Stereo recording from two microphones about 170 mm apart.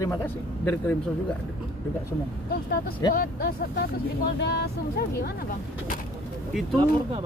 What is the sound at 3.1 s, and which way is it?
Speech, 60° left (ahead or behind).